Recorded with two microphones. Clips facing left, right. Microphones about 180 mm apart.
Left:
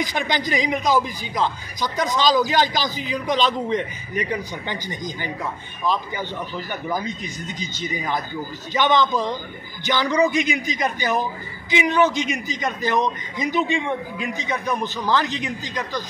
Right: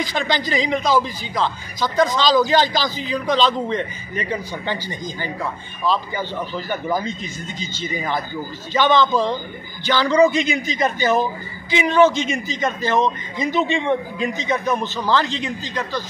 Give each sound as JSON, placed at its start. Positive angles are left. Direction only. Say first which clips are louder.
{"t": 0.0, "sound": "a man's voice", "louder": "right 2 dB", "side_deg": 15}